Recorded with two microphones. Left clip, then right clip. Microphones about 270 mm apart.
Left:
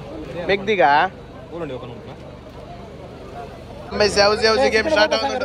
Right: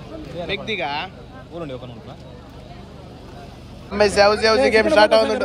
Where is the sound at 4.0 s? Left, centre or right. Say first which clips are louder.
Right 1 dB; centre.